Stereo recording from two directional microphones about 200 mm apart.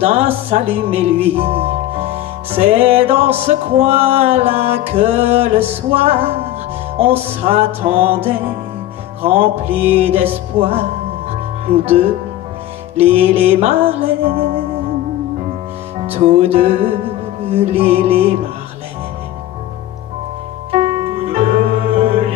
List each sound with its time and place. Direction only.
0.0 s music: 30° right (ahead or behind)
0.5 s speech: 30° right (ahead or behind)
3.4 s music: 30° right (ahead or behind)
16.0 s music: 30° right (ahead or behind)
20.7 s music: 30° right (ahead or behind)